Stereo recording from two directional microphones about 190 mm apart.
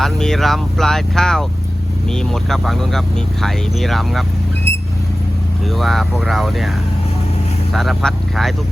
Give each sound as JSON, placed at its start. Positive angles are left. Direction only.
{"t": 0.0, "sound": "speech", "side_deg": 0}
{"t": 5.7, "sound": "speech", "side_deg": 0}
{"t": 7.7, "sound": "speech", "side_deg": 0}